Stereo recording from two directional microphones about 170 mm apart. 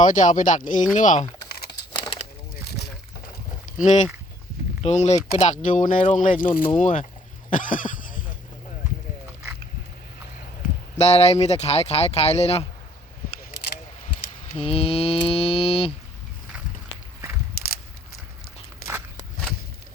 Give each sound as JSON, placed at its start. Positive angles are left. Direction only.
{"t": 0.0, "sound": "speech", "side_deg": 50}
{"t": 1.5, "sound": "crumpling", "side_deg": 65}
{"t": 2.7, "sound": "boat", "side_deg": 70}
{"t": 3.8, "sound": "speech", "side_deg": 45}
{"t": 7.5, "sound": "a sound", "side_deg": 50}
{"t": 10.9, "sound": "speech", "side_deg": 40}
{"t": 14.5, "sound": "mantra", "side_deg": 35}
{"t": 17.6, "sound": "a sound", "side_deg": 65}
{"t": 18.8, "sound": "a sound", "side_deg": 60}